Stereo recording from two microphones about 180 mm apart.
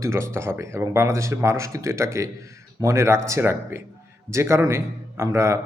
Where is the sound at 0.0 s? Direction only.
15° right (ahead or behind).